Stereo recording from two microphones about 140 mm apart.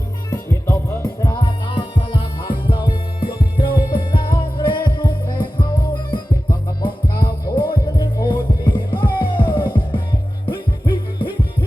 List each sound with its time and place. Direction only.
0.3 s music: 20° left (ahead or behind); by 6.1 s 35° left (ahead or behind)
7.5 s music: 35° left (ahead or behind)